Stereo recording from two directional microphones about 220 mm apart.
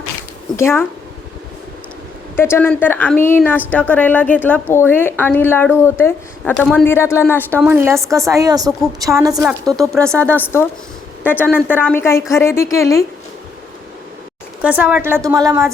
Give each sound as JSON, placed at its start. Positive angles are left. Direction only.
{"t": 0.5, "sound": "a woman's voice", "side_deg": 10}
{"t": 2.3, "sound": "a woman's voice", "side_deg": 10}
{"t": 7.6, "sound": "a woman's voice", "side_deg": -10}
{"t": 9.9, "sound": "a woman's voice", "side_deg": 5}
{"t": 14.6, "sound": "a woman's voice", "side_deg": -5}